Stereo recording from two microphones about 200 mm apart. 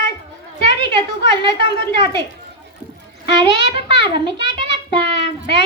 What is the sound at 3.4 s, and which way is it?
A child's voice, 25° right (ahead or behind).